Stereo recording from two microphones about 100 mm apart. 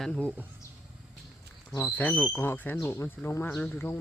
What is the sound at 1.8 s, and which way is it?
Speech, 15° left (ahead or behind).